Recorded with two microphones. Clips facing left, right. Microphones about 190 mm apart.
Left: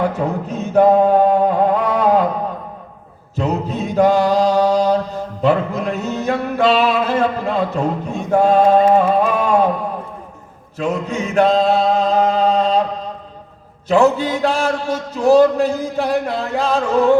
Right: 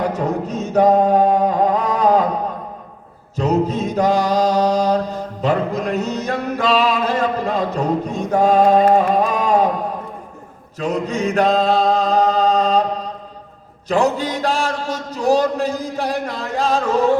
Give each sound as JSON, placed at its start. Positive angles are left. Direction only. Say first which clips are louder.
{"t": 0.0, "sound": "chant", "louder": "left 1 dB", "side_deg": -40}
{"t": 3.3, "sound": "mantra", "louder": "right 3 dB", "side_deg": -40}
{"t": 9.3, "sound": "a sound", "louder": "left 1 dB", "side_deg": -40}
{"t": 10.8, "sound": "chant", "louder": "even", "side_deg": -40}
{"t": 13.8, "sound": "mantra", "louder": "left 4 dB", "side_deg": -40}
{"t": 14.8, "sound": "a sound", "louder": "left 4 dB", "side_deg": -40}
{"t": 16.2, "sound": "music", "louder": "left 2 dB", "side_deg": -40}